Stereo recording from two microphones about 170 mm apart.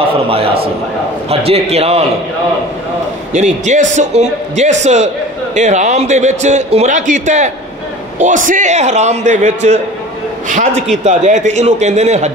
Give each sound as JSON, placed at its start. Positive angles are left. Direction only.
{"t": 0.3, "sound": "a man's voice", "side_deg": -35}
{"t": 3.3, "sound": "a man's voice", "side_deg": -45}